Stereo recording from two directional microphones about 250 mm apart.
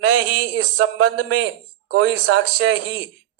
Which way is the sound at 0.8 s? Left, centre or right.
Right.